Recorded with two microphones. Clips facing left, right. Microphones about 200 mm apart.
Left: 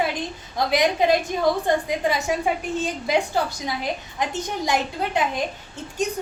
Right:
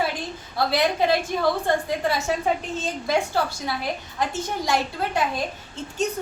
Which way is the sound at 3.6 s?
15° left (ahead or behind).